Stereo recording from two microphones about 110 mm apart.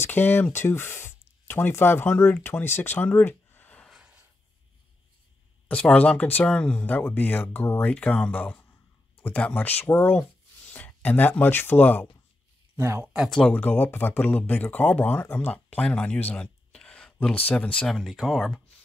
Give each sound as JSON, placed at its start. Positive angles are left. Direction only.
{"t": 0.0, "sound": "speech", "side_deg": 20}
{"t": 3.8, "sound": "a sound", "side_deg": -5}
{"t": 5.7, "sound": "speech", "side_deg": 10}
{"t": 12.7, "sound": "speech", "side_deg": -25}
{"t": 13.1, "sound": "speech", "side_deg": -5}
{"t": 13.4, "sound": "speech", "side_deg": 15}